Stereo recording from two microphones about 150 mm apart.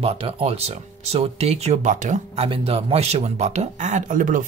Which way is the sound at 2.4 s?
40° right (ahead or behind).